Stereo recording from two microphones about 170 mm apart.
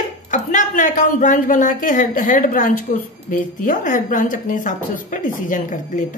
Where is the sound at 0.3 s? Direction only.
45° left (ahead or behind).